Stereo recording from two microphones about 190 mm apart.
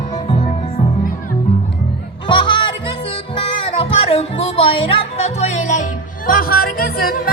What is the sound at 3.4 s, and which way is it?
Music, 30° left (ahead or behind).